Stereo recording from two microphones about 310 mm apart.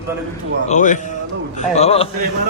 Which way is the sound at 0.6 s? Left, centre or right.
Left.